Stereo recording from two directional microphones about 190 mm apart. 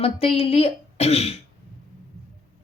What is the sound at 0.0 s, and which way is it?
A woman's voice, 30° left (ahead or behind).